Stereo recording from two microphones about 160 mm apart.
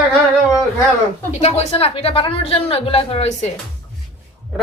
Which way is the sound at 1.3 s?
45° left (ahead or behind).